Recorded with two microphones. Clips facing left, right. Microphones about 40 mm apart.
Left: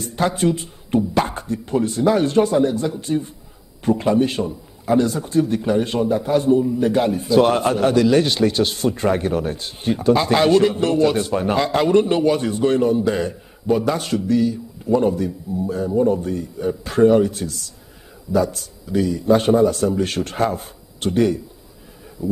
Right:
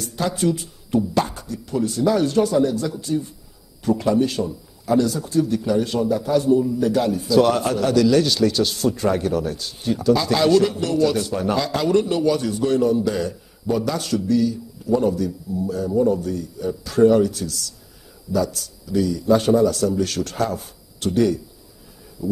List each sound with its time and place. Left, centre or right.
0.0 s a man's voice: left